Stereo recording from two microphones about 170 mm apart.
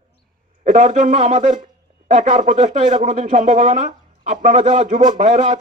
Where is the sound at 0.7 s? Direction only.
45° right (ahead or behind).